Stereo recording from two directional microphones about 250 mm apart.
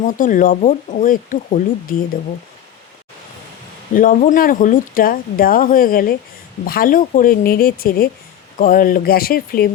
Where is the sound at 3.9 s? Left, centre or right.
Left.